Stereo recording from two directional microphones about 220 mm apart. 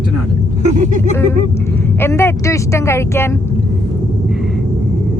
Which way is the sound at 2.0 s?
10° left (ahead or behind).